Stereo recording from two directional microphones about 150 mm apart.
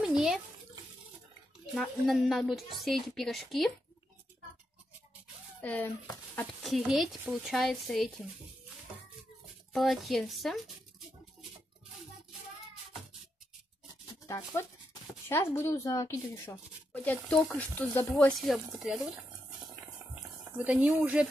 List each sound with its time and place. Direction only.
0.0 s water: 5° right (ahead or behind)
1.7 s speech: centre (ahead or behind)
5.6 s speech: 10° left (ahead or behind)
6.6 s speech: centre (ahead or behind)
9.7 s speech: centre (ahead or behind)
14.2 s speech: 20° left (ahead or behind)
18.4 s speech: centre (ahead or behind)
19.7 s a sound: 20° right (ahead or behind)
20.6 s speech: 10° right (ahead or behind)